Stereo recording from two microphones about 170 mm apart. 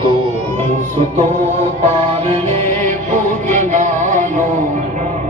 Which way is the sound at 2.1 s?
35° right (ahead or behind).